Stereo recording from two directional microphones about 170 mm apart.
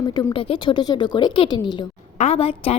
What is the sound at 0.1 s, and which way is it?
A woman's voice, 20° left (ahead or behind).